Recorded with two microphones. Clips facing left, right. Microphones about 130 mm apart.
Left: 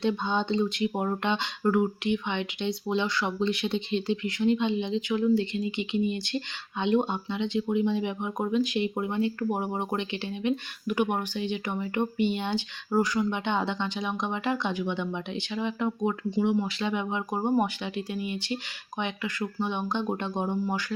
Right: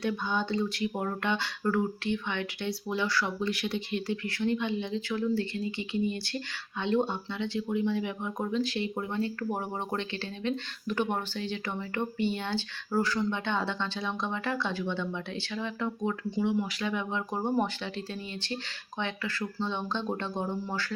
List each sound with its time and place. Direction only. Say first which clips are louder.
0.0 s speech: left 3 dB; 20° left (ahead or behind)